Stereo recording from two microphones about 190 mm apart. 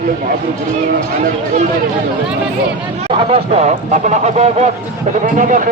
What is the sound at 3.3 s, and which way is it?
Speech, 35° right (ahead or behind).